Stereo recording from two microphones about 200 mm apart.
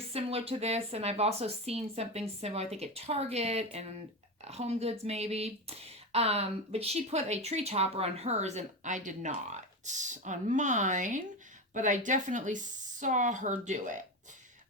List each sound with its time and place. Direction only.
0.1 s speech: 30° right (ahead or behind)